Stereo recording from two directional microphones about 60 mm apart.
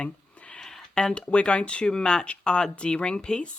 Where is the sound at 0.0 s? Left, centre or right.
Centre.